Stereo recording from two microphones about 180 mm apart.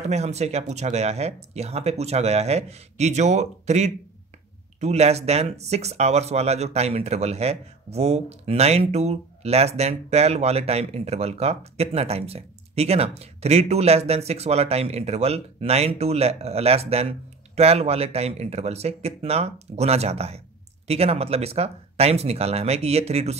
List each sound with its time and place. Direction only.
0.1 s speech: 40° right (ahead or behind)